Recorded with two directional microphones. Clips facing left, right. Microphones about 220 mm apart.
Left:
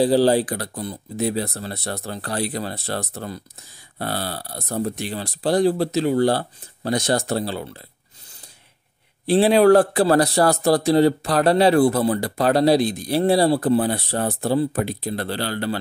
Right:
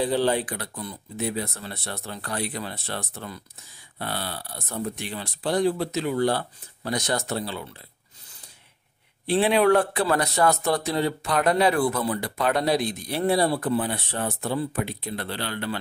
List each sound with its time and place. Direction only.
0.0 s a man's voice: 35° left (ahead or behind)
9.2 s a man's voice: 35° left (ahead or behind)